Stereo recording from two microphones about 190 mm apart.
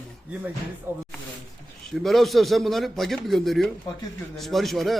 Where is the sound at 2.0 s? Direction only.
Centre (ahead or behind).